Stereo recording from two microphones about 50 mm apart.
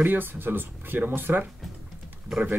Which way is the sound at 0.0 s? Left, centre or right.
Right.